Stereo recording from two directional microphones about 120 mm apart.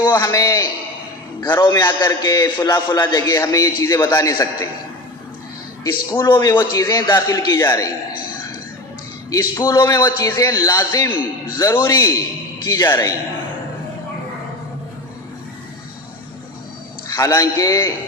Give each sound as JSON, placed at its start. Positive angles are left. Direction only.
{"t": 0.0, "sound": "a man's voice", "side_deg": 35}
{"t": 5.8, "sound": "a man's voice", "side_deg": 25}
{"t": 6.2, "sound": "a man's voice", "side_deg": 40}
{"t": 9.3, "sound": "a man's voice", "side_deg": 30}
{"t": 17.2, "sound": "a man's voice", "side_deg": 30}